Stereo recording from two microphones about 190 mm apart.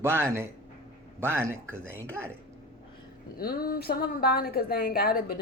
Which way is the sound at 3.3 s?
50° left (ahead or behind).